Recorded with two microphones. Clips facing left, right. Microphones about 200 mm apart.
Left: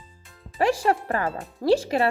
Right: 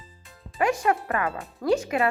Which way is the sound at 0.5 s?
30° left (ahead or behind).